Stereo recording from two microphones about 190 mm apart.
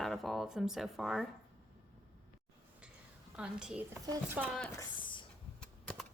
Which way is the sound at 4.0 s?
20° right (ahead or behind).